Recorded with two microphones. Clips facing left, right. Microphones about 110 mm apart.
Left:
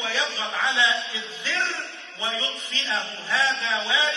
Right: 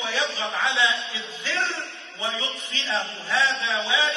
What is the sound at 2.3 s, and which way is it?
A man's voice, 25° right (ahead or behind).